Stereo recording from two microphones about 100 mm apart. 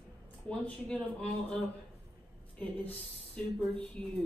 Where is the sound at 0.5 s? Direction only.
10° left (ahead or behind).